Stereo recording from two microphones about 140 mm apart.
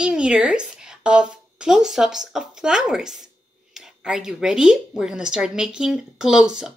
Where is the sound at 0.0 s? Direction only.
5° right (ahead or behind).